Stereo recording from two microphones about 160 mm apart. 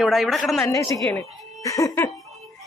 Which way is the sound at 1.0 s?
10° left (ahead or behind).